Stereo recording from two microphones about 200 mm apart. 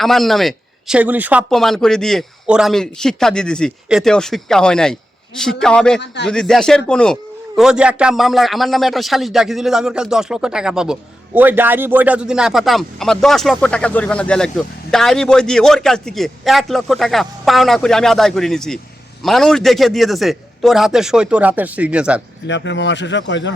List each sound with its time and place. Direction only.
0.0 s speech: centre (ahead or behind)
22.4 s speech: 65° left (ahead or behind)